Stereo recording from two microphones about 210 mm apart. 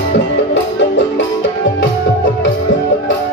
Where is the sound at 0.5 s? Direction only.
60° left (ahead or behind).